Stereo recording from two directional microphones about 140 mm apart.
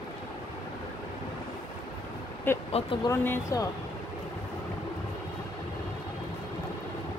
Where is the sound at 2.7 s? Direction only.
45° left (ahead or behind).